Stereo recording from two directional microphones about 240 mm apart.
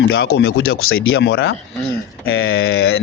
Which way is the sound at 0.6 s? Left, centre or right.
Left.